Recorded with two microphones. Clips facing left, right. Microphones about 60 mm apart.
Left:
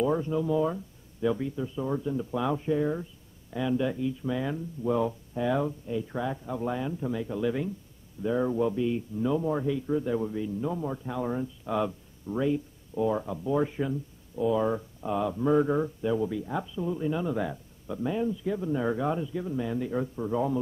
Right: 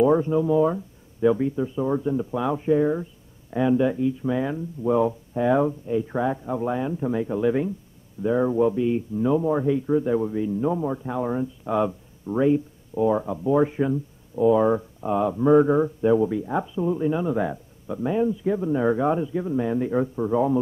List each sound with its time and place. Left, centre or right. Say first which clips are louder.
0.0 s speech: right 8 dB; right